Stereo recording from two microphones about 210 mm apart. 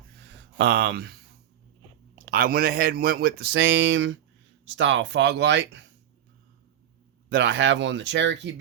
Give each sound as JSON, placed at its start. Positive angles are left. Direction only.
{"t": 0.5, "sound": "speech", "side_deg": -50}
{"t": 2.1, "sound": "speech", "side_deg": -45}
{"t": 7.3, "sound": "speech", "side_deg": -55}